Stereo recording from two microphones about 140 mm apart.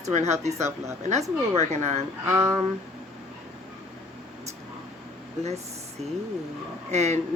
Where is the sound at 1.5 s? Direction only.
55° right (ahead or behind).